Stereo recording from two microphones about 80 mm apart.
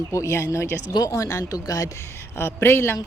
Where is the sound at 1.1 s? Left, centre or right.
Left.